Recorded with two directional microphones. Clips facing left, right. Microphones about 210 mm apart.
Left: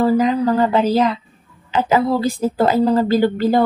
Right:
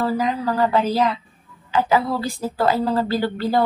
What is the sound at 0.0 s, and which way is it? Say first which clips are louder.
Speech: left 6 dB; 20° left (ahead or behind).